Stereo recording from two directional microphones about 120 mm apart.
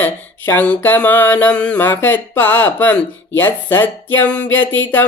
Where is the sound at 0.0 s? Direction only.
15° left (ahead or behind).